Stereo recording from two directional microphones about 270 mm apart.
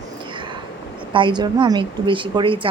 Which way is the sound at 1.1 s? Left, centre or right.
Centre.